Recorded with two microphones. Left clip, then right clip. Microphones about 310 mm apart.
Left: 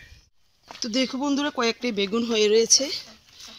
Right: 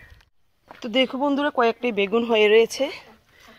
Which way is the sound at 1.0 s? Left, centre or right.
Centre.